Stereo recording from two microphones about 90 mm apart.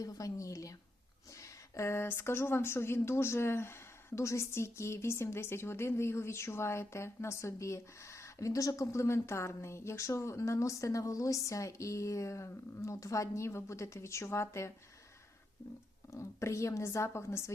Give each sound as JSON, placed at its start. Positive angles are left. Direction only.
{"t": 0.0, "sound": "speech", "side_deg": 40}
{"t": 16.1, "sound": "speech", "side_deg": 35}